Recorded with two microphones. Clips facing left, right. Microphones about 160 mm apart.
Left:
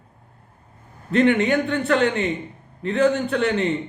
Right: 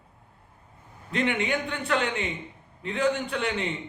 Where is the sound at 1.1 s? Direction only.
45° left (ahead or behind).